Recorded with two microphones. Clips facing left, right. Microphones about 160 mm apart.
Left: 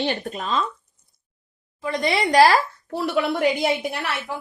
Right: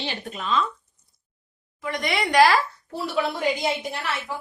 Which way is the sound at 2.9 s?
65° left (ahead or behind).